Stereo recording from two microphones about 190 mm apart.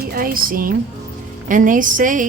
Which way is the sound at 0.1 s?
50° right (ahead or behind).